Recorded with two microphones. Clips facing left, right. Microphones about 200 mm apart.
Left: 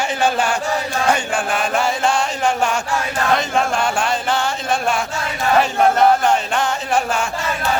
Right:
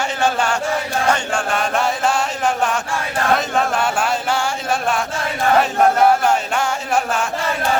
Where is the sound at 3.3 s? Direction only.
5° right (ahead or behind).